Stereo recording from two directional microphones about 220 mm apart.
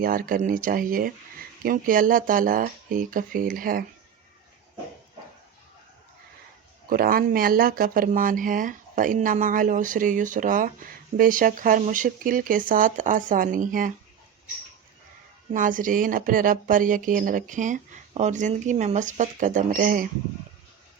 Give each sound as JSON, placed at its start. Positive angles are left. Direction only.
{"t": 0.0, "sound": "speech", "side_deg": -40}
{"t": 6.8, "sound": "speech", "side_deg": -40}
{"t": 15.5, "sound": "speech", "side_deg": -35}